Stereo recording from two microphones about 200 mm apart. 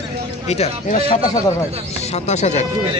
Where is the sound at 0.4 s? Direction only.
30° left (ahead or behind).